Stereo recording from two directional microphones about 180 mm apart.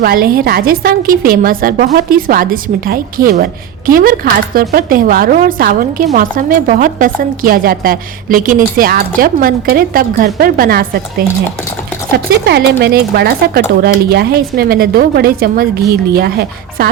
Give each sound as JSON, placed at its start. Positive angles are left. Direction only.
{"t": 0.0, "sound": "a woman's voice", "side_deg": -55}